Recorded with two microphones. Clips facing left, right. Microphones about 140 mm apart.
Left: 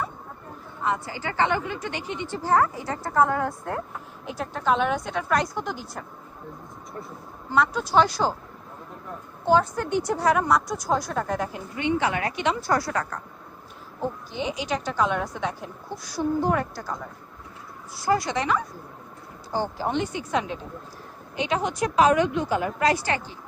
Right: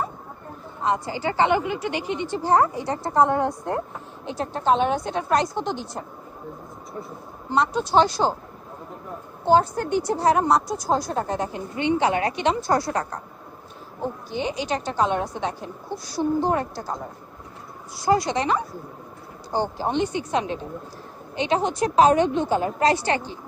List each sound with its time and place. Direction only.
0.8 s a woman's voice: 20° right (ahead or behind)
7.5 s a woman's voice: 25° right (ahead or behind)
9.5 s a woman's voice: 35° right (ahead or behind)
14.6 s a woman's voice: 30° right (ahead or behind)
18.3 s a woman's voice: 25° right (ahead or behind)